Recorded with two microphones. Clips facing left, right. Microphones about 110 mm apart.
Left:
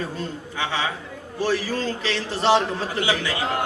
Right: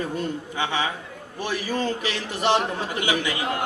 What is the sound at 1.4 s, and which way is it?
A man's voice, 15° right (ahead or behind).